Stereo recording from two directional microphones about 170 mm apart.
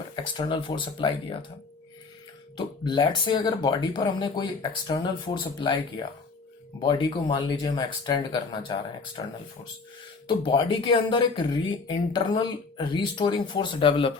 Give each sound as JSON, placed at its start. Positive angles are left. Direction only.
{"t": 0.3, "sound": "speech", "side_deg": 25}
{"t": 2.6, "sound": "speech", "side_deg": 25}
{"t": 6.8, "sound": "speech", "side_deg": 30}
{"t": 10.2, "sound": "speech", "side_deg": 30}